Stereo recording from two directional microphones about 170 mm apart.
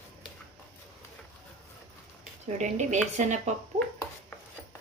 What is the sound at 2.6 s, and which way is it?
Speech, 45° right (ahead or behind).